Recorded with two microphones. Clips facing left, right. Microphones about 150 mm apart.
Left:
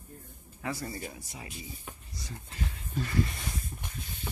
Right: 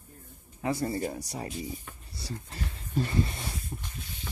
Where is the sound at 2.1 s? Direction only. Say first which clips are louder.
Right 4 dB; 35° right (ahead or behind).